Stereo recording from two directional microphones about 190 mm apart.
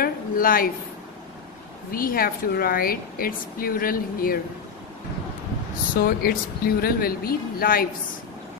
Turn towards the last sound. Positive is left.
turn(degrees=50)  # may be behind; listen again after turning